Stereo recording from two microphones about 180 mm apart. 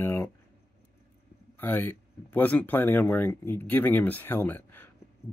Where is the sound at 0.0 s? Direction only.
15° left (ahead or behind).